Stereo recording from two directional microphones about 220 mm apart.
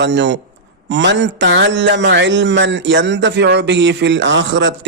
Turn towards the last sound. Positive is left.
turn(degrees=-55)  # may be behind; listen again after turning